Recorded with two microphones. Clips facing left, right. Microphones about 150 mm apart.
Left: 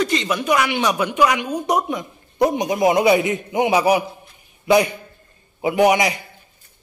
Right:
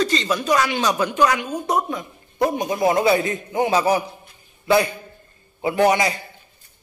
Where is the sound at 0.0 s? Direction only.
15° left (ahead or behind).